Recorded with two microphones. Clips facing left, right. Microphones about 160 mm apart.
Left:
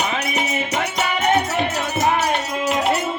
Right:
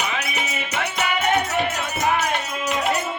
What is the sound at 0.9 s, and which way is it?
Music, 20° left (ahead or behind).